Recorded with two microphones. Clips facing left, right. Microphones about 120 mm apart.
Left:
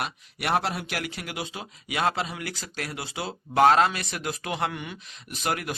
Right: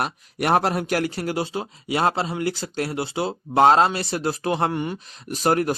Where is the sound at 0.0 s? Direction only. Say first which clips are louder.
Right 7 dB; 45° right (ahead or behind).